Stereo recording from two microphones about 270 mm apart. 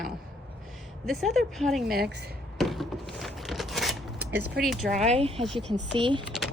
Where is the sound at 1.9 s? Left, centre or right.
Right.